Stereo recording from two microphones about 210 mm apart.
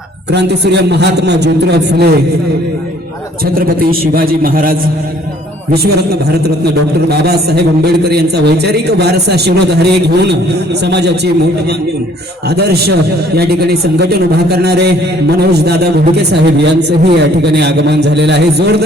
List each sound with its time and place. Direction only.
0.3 s a man's voice: 55° right (ahead or behind)
3.7 s a man's voice: 45° right (ahead or behind)
7.1 s a man's voice: 50° right (ahead or behind)
12.5 s a man's voice: 50° right (ahead or behind)